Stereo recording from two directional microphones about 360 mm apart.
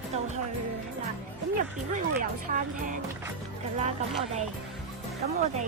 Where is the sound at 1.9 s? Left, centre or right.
Right.